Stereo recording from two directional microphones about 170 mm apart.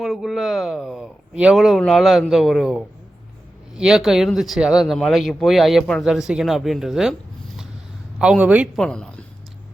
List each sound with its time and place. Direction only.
0.0 s speech: centre (ahead or behind)
8.2 s speech: 5° right (ahead or behind)